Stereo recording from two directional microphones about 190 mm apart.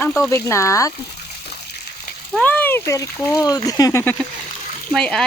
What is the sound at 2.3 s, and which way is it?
Speech, 5° left (ahead or behind).